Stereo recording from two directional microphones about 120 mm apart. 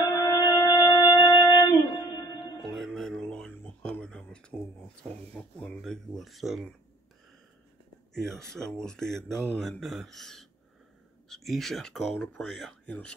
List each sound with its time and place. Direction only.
0.1 s music: 30° left (ahead or behind)
2.7 s a sound: centre (ahead or behind)
8.1 s speech: 5° left (ahead or behind)